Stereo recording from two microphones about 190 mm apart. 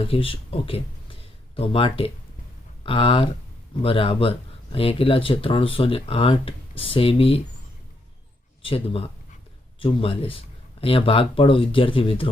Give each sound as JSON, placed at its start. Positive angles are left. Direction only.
{"t": 0.0, "sound": "speech", "side_deg": 30}
{"t": 8.6, "sound": "speech", "side_deg": 30}